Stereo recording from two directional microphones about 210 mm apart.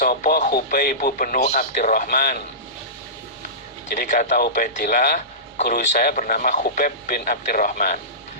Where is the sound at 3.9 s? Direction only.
40° left (ahead or behind).